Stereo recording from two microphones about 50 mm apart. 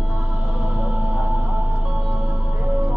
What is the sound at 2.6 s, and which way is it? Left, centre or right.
Music, right.